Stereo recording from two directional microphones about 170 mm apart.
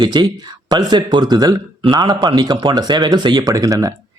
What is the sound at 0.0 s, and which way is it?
Speech, 25° right (ahead or behind).